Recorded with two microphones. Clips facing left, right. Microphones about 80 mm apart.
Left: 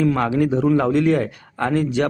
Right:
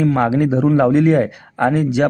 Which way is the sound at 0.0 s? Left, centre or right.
Right.